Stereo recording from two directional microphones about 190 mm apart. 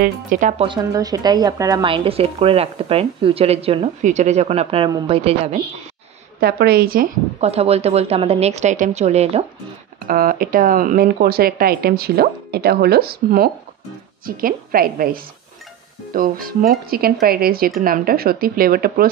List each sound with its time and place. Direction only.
0.0 s speech: 45° right (ahead or behind)
0.7 s speech: 20° right (ahead or behind)
6.4 s speech: 55° right (ahead or behind)
7.3 s speech: 35° right (ahead or behind)
10.0 s speech: 50° right (ahead or behind)